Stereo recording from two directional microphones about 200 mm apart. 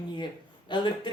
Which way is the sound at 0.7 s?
20° left (ahead or behind).